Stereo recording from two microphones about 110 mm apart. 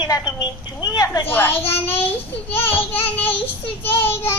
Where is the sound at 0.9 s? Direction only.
35° left (ahead or behind).